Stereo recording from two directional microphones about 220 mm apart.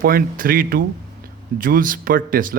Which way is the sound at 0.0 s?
40° right (ahead or behind).